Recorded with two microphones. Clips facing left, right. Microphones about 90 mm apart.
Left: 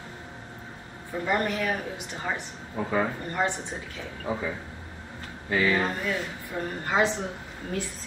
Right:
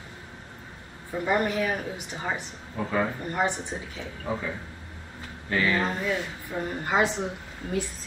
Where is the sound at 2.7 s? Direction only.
10° left (ahead or behind).